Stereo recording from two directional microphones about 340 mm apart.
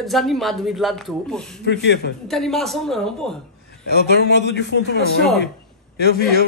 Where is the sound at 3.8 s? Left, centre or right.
Left.